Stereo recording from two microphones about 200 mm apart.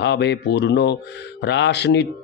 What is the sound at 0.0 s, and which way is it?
Speech, 60° left (ahead or behind).